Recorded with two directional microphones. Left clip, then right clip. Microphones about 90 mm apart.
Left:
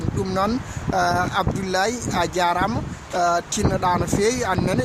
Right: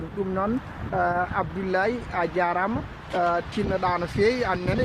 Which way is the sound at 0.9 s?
35° left (ahead or behind).